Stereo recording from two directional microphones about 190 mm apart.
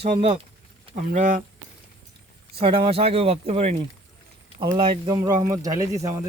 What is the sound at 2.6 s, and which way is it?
Speech, 30° right (ahead or behind).